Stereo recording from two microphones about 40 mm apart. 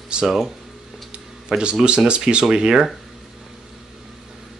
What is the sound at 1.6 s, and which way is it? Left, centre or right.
Speech, right.